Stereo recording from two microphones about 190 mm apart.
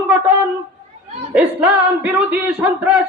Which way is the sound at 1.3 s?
5° right (ahead or behind).